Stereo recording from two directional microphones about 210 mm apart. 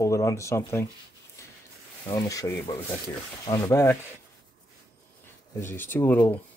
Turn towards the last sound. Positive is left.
turn(degrees=10)  # may be behind; listen again after turning